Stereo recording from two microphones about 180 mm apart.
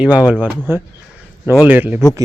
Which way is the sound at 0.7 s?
15° right (ahead or behind).